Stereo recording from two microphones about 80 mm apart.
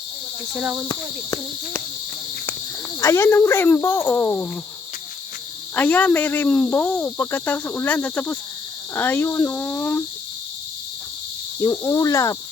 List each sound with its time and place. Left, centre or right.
0.5 s speech: right
3.0 s speech: left
5.7 s speech: left
11.6 s speech: left
12.0 s speech: left